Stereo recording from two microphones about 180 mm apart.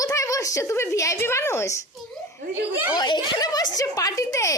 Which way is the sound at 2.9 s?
25° left (ahead or behind).